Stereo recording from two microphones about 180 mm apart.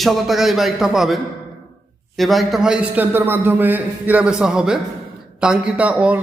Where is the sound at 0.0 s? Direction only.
Centre (ahead or behind).